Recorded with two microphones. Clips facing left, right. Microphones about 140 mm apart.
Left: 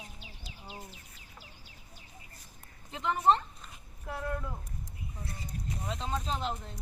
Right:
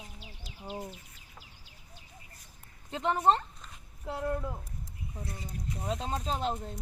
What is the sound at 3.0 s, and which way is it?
Speech, 40° right (ahead or behind).